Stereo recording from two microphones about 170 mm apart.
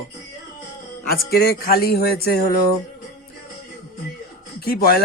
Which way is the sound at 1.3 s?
65° left (ahead or behind).